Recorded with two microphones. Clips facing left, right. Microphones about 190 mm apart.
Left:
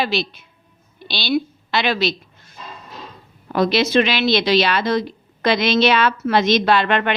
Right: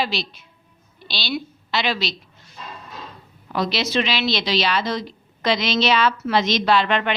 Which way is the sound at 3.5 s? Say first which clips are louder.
Left 6 dB; 50° left (ahead or behind).